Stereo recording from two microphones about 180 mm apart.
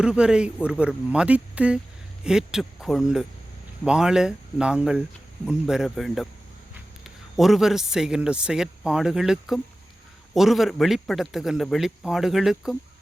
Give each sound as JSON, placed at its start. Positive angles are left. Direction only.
{"t": 0.0, "sound": "a man's voice", "side_deg": -5}